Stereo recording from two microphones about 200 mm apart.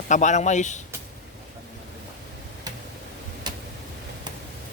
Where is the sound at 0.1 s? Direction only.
35° left (ahead or behind).